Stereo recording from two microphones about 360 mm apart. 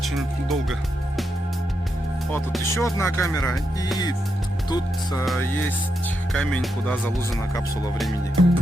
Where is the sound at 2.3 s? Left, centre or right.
Centre.